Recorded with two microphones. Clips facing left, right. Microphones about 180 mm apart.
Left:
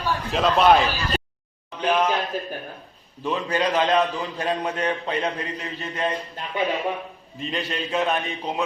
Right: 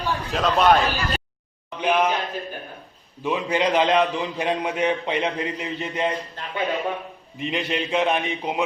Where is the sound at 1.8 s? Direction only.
15° right (ahead or behind).